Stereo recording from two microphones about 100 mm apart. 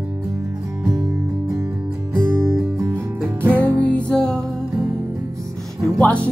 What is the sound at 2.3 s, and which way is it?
Music, 25° right (ahead or behind).